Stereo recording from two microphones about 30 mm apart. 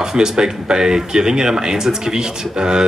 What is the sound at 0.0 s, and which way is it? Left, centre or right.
Speech, right.